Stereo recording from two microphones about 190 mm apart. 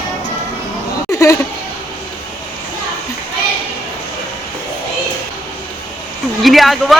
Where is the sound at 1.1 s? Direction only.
15° left (ahead or behind).